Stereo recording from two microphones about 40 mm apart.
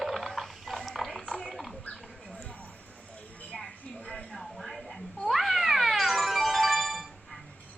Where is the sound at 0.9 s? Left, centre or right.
Centre.